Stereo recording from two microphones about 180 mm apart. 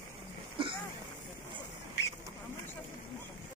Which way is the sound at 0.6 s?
30° right (ahead or behind).